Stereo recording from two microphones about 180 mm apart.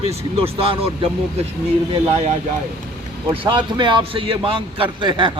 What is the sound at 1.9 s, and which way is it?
A man's voice, 35° right (ahead or behind).